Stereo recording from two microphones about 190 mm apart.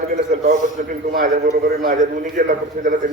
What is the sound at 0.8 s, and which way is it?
Speech, 50° right (ahead or behind).